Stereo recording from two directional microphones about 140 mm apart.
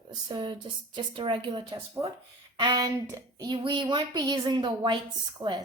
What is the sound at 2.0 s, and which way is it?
Speech, 25° right (ahead or behind).